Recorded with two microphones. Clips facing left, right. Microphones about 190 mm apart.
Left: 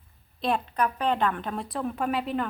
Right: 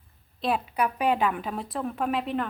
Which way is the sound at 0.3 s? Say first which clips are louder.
Even; 5° right (ahead or behind).